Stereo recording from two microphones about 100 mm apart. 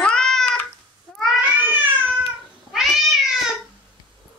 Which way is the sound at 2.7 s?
Centre (ahead or behind).